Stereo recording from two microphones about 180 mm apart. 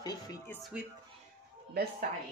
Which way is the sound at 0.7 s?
10° right (ahead or behind).